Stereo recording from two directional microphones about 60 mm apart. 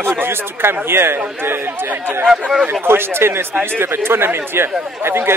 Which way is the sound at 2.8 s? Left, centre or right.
Right.